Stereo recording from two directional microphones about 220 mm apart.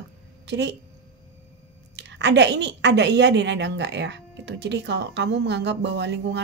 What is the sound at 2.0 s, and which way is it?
A woman's voice, 50° right (ahead or behind).